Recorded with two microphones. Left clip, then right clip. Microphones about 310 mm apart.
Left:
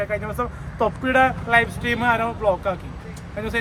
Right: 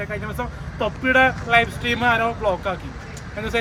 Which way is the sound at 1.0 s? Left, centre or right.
Left.